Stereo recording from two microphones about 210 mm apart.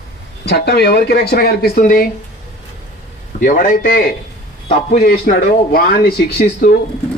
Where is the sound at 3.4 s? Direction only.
40° left (ahead or behind).